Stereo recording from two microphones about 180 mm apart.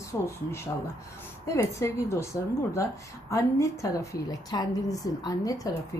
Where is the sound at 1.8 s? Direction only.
15° left (ahead or behind).